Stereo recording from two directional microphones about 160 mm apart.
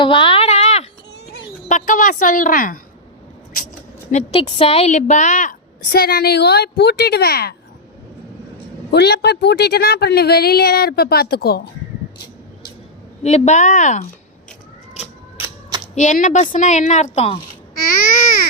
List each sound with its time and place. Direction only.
0.0 s a sound: 30° left (ahead or behind)
1.6 s a sound: 55° left (ahead or behind)
4.1 s a woman's voice: 35° left (ahead or behind); by 5.5 s 50° left (ahead or behind)
5.9 s speech: 75° left (ahead or behind)
8.9 s a woman's voice: 90° left; by 11.7 s 75° left (ahead or behind)
13.2 s a woman's voice: 45° left (ahead or behind)
16.0 s a woman's voice: 50° left (ahead or behind)